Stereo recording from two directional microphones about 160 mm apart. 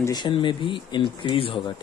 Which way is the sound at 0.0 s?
25° left (ahead or behind).